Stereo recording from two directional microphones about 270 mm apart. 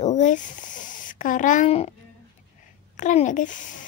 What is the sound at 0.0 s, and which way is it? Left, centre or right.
Speech, left.